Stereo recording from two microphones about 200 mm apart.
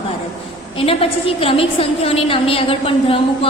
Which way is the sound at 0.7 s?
30° left (ahead or behind).